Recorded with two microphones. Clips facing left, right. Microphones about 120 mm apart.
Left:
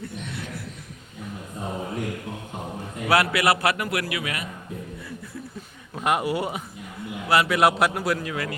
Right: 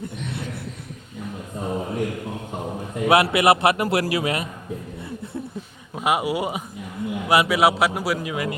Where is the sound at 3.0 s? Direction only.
20° right (ahead or behind).